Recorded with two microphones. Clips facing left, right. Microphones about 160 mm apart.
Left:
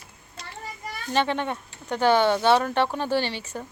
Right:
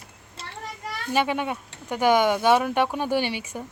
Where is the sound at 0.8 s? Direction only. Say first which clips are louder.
Right 3 dB; 80° right.